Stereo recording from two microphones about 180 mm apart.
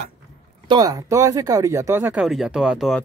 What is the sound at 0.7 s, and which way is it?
A man's voice, 20° right (ahead or behind).